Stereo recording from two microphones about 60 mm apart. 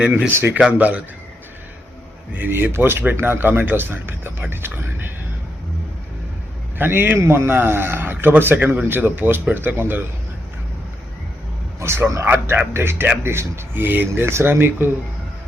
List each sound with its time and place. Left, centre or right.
0.3 s a man's voice: right
0.7 s a man's voice: right
2.3 s speech: right
6.7 s speech: right
11.8 s a man's voice: right
12.2 s speech: right
12.7 s a man's voice: right